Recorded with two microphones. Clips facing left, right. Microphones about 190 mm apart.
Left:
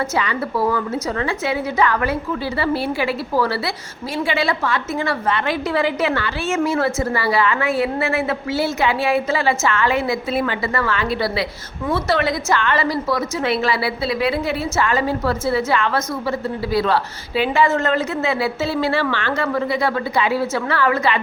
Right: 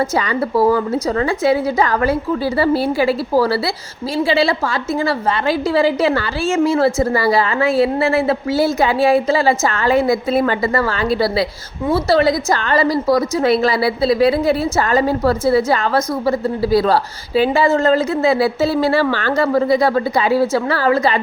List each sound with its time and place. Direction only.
0.2 s a woman's voice: 40° right (ahead or behind)